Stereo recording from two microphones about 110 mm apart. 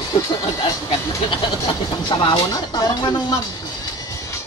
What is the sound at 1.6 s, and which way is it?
Speech, 50° left (ahead or behind).